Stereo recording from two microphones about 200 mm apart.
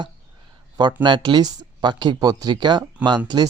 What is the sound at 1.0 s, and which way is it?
Speech, 25° right (ahead or behind).